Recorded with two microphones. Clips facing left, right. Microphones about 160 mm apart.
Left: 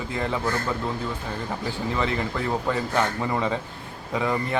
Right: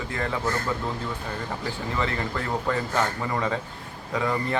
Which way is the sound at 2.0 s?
15° left (ahead or behind).